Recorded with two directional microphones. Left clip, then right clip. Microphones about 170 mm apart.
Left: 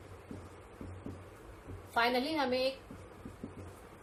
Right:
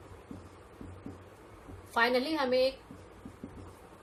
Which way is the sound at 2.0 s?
50° right (ahead or behind).